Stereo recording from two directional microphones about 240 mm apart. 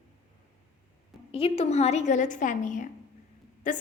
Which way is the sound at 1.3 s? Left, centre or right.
Left.